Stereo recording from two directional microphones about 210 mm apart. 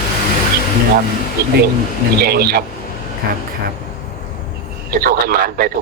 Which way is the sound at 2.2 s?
50° right (ahead or behind).